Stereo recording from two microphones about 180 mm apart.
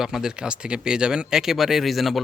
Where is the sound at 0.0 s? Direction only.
5° right (ahead or behind).